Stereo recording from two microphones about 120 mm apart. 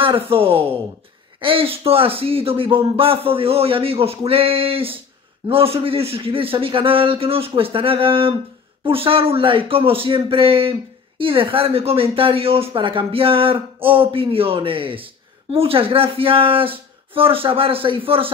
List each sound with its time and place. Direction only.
0.0 s speech: 50° right (ahead or behind)